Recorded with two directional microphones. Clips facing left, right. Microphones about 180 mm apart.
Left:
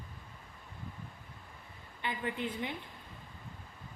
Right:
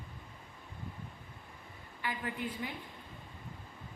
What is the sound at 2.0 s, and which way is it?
Speech, 25° left (ahead or behind).